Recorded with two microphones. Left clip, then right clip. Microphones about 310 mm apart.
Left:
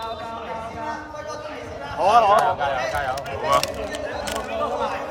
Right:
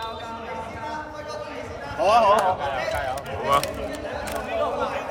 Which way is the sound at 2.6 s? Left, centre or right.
Left.